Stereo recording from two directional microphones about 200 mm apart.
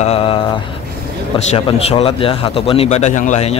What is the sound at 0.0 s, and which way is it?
Mantra, 30° left (ahead or behind).